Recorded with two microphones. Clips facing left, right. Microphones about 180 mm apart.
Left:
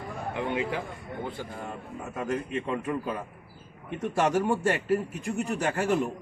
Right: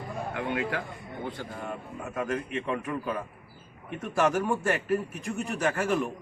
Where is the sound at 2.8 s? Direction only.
25° left (ahead or behind).